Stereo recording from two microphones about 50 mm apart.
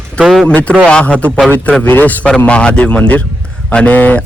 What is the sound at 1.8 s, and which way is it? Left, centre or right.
Speech, left.